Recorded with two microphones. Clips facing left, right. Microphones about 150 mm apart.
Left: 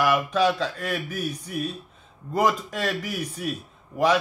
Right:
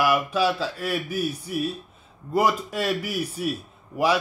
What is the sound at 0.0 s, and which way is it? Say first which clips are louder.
A man's voice: even; 10° right (ahead or behind).